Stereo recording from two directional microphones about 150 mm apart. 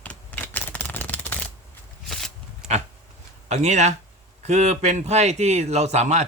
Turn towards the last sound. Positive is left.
turn(degrees=-50)  # may be behind; listen again after turning